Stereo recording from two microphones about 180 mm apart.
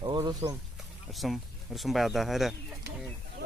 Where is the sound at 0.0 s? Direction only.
25° right (ahead or behind).